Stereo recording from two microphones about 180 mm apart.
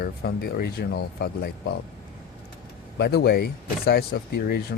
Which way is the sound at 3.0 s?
60° left (ahead or behind).